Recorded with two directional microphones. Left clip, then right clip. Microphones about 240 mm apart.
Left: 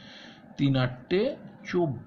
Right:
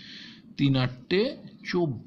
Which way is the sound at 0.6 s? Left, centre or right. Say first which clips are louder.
Right 1 dB; right.